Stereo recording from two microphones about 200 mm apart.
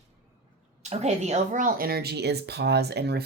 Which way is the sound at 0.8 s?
35° right (ahead or behind).